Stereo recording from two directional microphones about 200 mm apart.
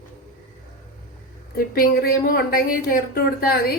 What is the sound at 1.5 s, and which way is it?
A woman's voice, 45° left (ahead or behind).